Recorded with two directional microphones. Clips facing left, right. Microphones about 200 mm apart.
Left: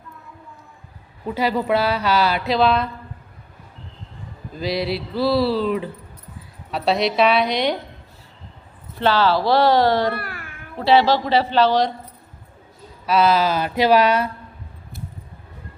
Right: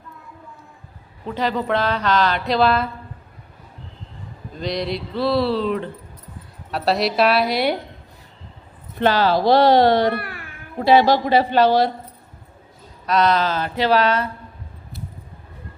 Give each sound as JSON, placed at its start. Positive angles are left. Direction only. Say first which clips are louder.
{"t": 1.2, "sound": "a woman's voice", "louder": "left 1 dB", "side_deg": 10}
{"t": 4.5, "sound": "speech", "louder": "left 1 dB", "side_deg": 5}
{"t": 9.1, "sound": "speech", "louder": "right 2 dB", "side_deg": -15}
{"t": 10.2, "sound": "a child's voice", "louder": "right 1 dB", "side_deg": 0}
{"t": 10.8, "sound": "speech", "louder": "right 1 dB", "side_deg": -15}
{"t": 13.1, "sound": "a woman's voice", "louder": "left 1 dB", "side_deg": 5}